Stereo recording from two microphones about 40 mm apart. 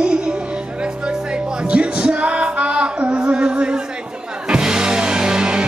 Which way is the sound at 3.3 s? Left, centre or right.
Right.